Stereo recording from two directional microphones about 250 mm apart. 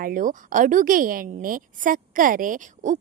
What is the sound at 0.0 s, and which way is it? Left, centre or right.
A woman's voice, right.